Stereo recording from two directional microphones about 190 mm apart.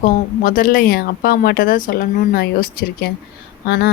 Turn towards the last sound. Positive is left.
turn(degrees=60)  # may be behind; listen again after turning